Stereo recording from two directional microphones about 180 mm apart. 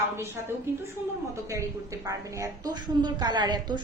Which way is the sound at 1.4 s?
15° right (ahead or behind).